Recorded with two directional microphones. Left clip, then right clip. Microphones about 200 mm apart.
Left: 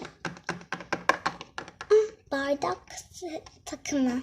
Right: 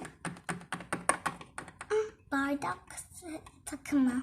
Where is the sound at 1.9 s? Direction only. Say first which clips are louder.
Left 9 dB; 20° left (ahead or behind).